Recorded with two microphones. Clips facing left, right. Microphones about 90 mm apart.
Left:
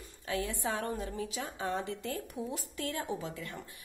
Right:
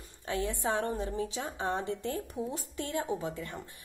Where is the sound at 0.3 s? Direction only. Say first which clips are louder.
Right 3 dB; 25° right (ahead or behind).